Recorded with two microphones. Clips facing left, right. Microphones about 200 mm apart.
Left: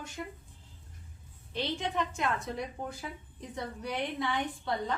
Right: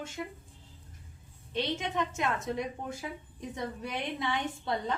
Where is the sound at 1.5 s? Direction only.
20° right (ahead or behind).